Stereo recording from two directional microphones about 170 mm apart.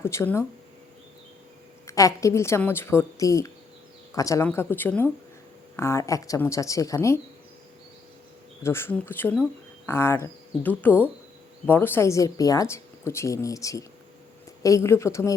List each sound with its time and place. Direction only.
0.0 s speech: 15° left (ahead or behind)
1.9 s speech: 20° left (ahead or behind)
8.6 s speech: 15° left (ahead or behind)